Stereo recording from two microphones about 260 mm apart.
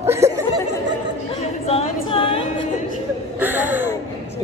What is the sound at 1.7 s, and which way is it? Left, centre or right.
A capella, left.